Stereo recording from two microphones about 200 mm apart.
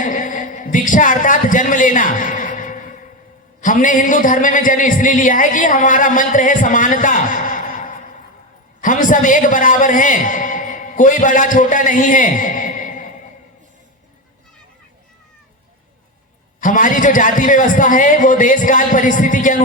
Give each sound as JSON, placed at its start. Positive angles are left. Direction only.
{"t": 0.0, "sound": "a sound", "side_deg": 40}
{"t": 3.6, "sound": "a man's voice", "side_deg": 40}
{"t": 16.6, "sound": "a man's voice", "side_deg": 40}